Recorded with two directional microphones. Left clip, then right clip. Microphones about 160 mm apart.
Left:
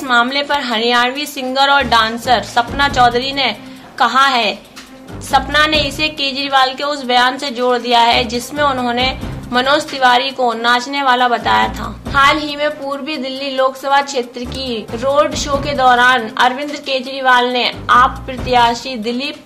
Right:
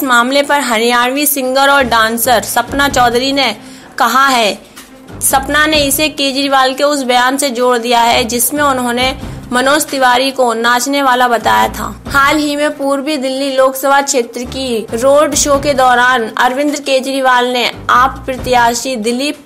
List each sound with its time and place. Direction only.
0.0 s a woman's voice: 40° right (ahead or behind)